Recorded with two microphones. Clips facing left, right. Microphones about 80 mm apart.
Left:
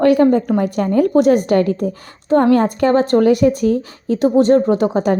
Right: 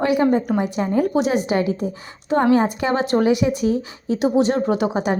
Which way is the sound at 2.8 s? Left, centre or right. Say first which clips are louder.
Left 6 dB; left.